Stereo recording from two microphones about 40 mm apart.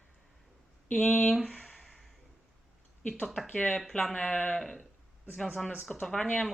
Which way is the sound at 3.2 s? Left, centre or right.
Centre.